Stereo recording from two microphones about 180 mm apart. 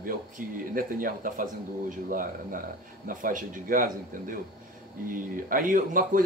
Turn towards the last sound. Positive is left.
turn(degrees=-50)  # may be behind; listen again after turning